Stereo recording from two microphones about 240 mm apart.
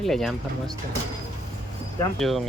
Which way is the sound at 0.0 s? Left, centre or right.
Centre.